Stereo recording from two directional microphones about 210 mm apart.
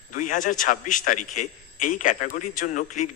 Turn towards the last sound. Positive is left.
turn(degrees=35)  # may be behind; listen again after turning